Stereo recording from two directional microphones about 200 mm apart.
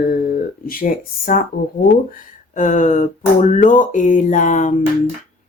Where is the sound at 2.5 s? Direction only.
40° left (ahead or behind).